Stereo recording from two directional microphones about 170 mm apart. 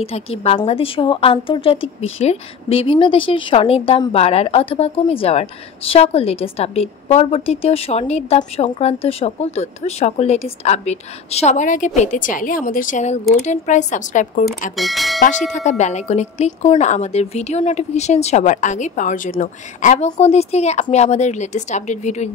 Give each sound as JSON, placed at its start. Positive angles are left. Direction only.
{"t": 0.0, "sound": "a woman's voice", "side_deg": 35}
{"t": 14.8, "sound": "speech", "side_deg": 0}
{"t": 15.8, "sound": "a woman's voice", "side_deg": 40}